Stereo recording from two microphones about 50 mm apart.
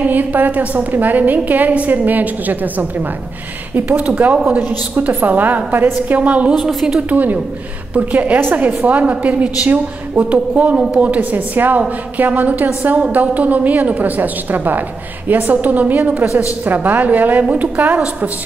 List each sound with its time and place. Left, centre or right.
0.0 s a woman's voice: right
6.6 s speech: centre
7.0 s a woman's voice: right